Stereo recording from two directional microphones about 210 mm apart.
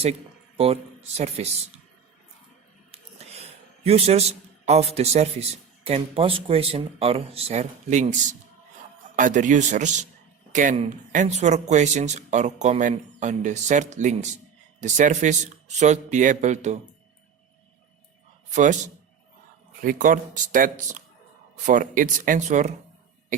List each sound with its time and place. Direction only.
0.0 s speech: 30° right (ahead or behind)
2.9 s a man's voice: 30° right (ahead or behind)
18.5 s speech: 35° right (ahead or behind)